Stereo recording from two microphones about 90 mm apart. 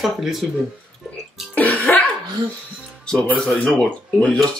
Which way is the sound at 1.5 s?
20° left (ahead or behind).